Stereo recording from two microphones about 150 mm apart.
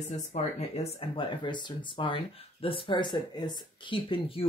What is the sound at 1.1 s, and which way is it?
Speech, 35° left (ahead or behind).